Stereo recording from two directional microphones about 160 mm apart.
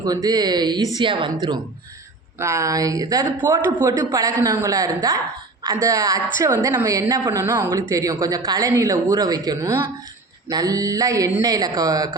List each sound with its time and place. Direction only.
0.0 s a woman's voice: 25° right (ahead or behind)
2.4 s a woman's voice: 20° right (ahead or behind)